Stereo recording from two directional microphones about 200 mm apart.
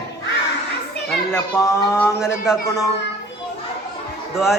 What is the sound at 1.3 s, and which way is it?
Speech, 15° left (ahead or behind).